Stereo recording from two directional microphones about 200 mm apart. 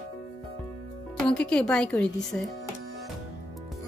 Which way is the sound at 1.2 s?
5° left (ahead or behind).